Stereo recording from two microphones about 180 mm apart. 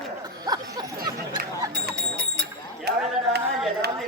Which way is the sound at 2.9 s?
65° right (ahead or behind).